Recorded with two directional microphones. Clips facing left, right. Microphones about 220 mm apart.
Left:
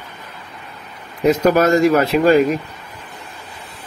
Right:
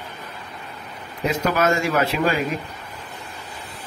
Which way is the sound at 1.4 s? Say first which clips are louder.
Left 7 dB; 40° left (ahead or behind).